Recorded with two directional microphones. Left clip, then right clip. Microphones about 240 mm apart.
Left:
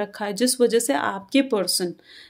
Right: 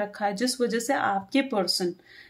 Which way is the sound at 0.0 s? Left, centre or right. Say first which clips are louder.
Left 3 dB; left.